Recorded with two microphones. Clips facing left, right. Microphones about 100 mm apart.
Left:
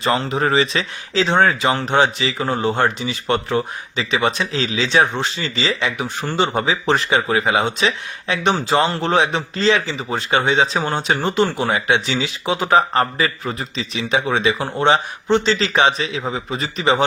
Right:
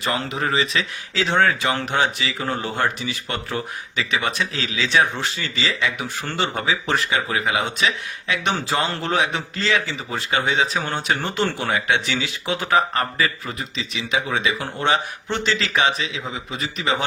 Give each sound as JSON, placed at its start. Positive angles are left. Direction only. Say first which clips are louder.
{"t": 0.0, "sound": "speech", "louder": "left 5 dB", "side_deg": 30}
{"t": 10.8, "sound": "speech", "louder": "left 4 dB", "side_deg": 20}
{"t": 14.8, "sound": "a man's voice", "louder": "left 5 dB", "side_deg": 25}